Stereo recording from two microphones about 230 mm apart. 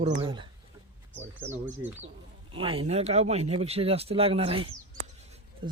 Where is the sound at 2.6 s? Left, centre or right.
Right.